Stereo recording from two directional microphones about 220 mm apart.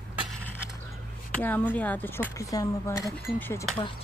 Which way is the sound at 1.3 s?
5° left (ahead or behind).